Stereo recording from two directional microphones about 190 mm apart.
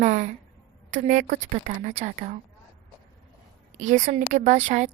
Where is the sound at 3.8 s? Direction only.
40° right (ahead or behind).